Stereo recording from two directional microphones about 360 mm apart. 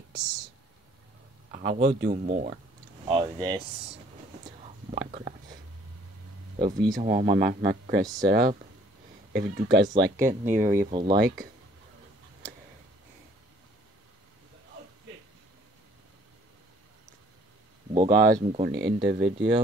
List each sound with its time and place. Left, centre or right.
1.5 s speech: centre
7.0 s speech: centre
7.3 s speech: right; by 11.1 s centre
11.1 s speech: right
17.9 s speech: centre; by 19.5 s right